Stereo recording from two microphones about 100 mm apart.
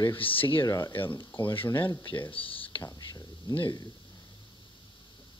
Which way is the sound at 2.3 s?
65° left (ahead or behind).